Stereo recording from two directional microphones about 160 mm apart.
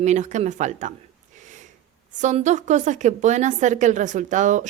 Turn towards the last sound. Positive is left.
turn(degrees=-50)  # may be behind; listen again after turning